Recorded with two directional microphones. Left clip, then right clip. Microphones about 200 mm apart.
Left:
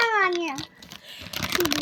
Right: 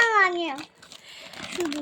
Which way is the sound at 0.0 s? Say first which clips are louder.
Right 2 dB; 20° right (ahead or behind).